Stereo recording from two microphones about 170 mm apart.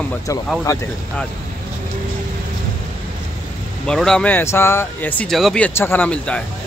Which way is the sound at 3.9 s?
5° left (ahead or behind).